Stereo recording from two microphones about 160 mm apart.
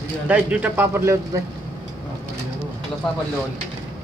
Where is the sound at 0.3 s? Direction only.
10° right (ahead or behind).